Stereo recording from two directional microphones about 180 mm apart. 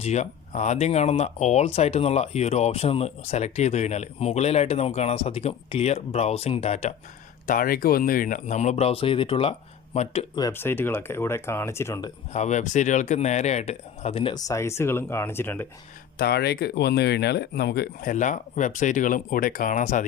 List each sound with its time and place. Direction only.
0.0 s speech: 40° left (ahead or behind)
7.4 s speech: 50° left (ahead or behind)
10.3 s speech: 15° left (ahead or behind)
12.3 s speech: 40° left (ahead or behind); by 15.6 s 10° left (ahead or behind)
16.1 s speech: 60° left (ahead or behind)
18.1 s speech: 45° left (ahead or behind)